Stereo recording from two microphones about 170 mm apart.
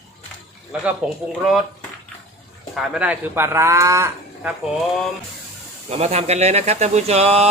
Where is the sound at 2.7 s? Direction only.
5° right (ahead or behind).